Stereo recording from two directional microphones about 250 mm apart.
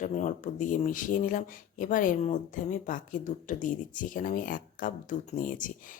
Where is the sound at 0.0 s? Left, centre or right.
Left.